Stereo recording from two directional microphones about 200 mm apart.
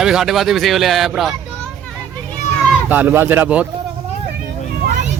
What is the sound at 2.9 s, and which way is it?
Speech, 10° right (ahead or behind).